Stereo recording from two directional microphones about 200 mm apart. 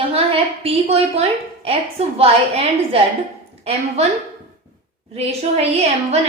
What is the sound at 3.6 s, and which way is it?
Speech, 30° right (ahead or behind).